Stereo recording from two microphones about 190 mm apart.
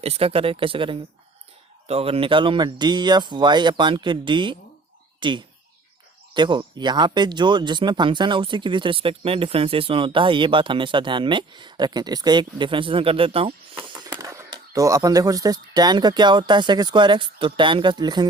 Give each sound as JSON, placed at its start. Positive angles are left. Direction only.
{"t": 0.0, "sound": "speech", "side_deg": -30}
{"t": 13.9, "sound": "speech", "side_deg": -20}